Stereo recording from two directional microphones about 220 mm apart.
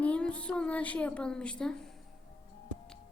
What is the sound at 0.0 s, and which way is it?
A woman's voice, 5° left (ahead or behind).